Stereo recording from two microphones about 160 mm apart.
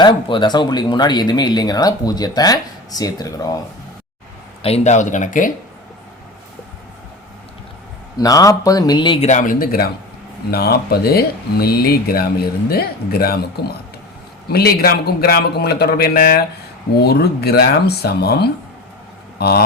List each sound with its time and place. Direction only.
0.0 s speech: 30° left (ahead or behind)
4.6 s speech: 40° left (ahead or behind)
8.2 s speech: 20° left (ahead or behind)
9.2 s speech: 50° left (ahead or behind); by 19.6 s 80° left